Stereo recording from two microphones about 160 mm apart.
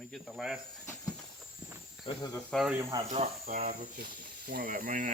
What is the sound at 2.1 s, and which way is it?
Cricket, 20° left (ahead or behind).